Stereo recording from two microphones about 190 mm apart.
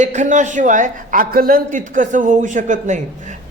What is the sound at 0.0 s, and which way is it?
A man's voice, 40° right (ahead or behind).